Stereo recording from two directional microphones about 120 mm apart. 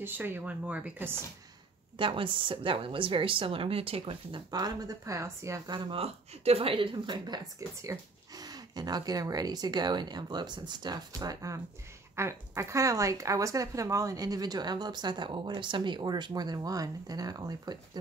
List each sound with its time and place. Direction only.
0.0 s speech: 20° right (ahead or behind)
2.0 s speech: 45° right (ahead or behind); by 5.6 s 25° right (ahead or behind)
5.7 s speech: 50° right (ahead or behind); by 17.7 s 30° right (ahead or behind)